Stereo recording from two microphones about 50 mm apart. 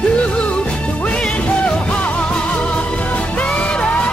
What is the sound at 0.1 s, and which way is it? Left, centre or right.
Music, left.